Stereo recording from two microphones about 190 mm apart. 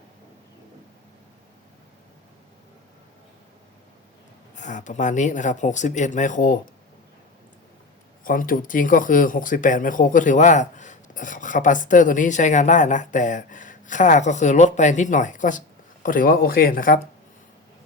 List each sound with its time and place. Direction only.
4.5 s speech: 40° left (ahead or behind)
8.2 s speech: 45° left (ahead or behind)